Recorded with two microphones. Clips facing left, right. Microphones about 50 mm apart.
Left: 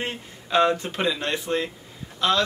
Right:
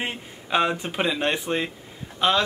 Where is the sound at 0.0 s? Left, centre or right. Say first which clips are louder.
Even; centre.